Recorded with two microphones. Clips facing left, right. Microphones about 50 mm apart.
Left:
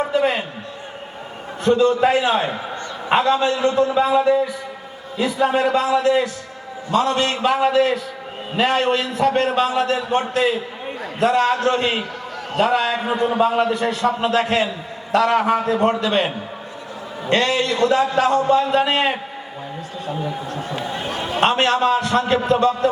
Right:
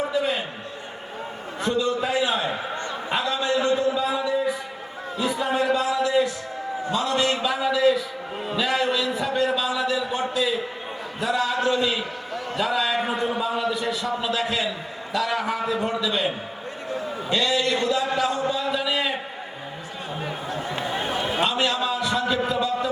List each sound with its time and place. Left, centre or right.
0.1 s a sound: left
1.6 s a man's voice: left
5.4 s a man's voice: left
21.3 s a man's voice: left